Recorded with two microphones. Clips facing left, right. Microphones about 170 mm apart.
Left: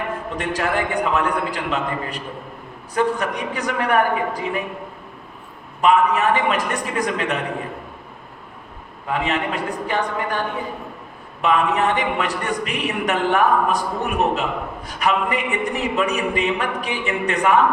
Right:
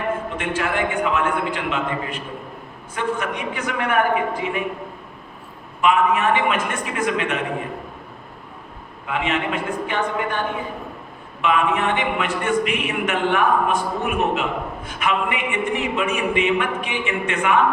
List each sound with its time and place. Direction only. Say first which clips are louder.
0.3 s a man's voice: left 5 dB; 40° left (ahead or behind)
5.8 s a man's voice: left 1 dB; 40° left (ahead or behind)
9.0 s a man's voice: left 1 dB; 40° left (ahead or behind)
11.4 s a man's voice: left 1 dB; 40° left (ahead or behind)